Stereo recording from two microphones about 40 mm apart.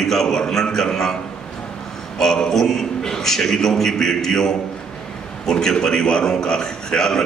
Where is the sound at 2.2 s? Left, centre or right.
Centre.